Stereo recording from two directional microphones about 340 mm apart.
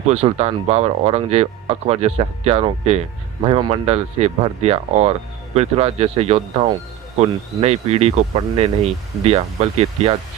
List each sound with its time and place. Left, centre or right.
0.1 s speech: centre